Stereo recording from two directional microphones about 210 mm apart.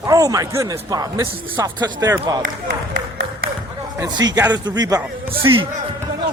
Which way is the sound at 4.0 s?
20° right (ahead or behind).